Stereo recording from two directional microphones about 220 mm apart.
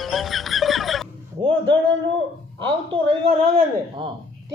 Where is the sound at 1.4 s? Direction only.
25° right (ahead or behind).